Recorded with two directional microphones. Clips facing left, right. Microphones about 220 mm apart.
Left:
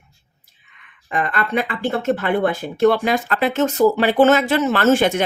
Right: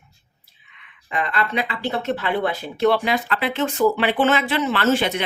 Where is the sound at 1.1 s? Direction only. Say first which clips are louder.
Left 3 dB; 50° left (ahead or behind).